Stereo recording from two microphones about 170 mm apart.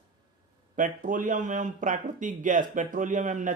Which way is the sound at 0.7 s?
50° right (ahead or behind).